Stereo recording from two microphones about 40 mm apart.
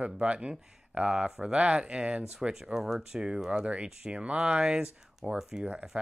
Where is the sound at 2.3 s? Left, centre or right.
Centre.